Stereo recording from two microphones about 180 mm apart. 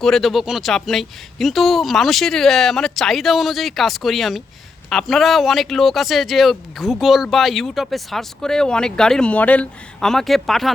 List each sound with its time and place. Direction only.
0.0 s speech: centre (ahead or behind)